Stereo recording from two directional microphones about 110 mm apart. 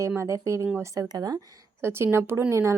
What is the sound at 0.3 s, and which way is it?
Speech, 25° right (ahead or behind).